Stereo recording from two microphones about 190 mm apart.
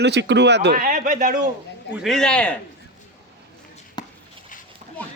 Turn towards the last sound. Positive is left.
turn(degrees=20)  # may be behind; listen again after turning